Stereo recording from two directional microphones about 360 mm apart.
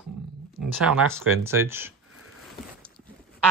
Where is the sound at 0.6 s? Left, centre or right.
Right.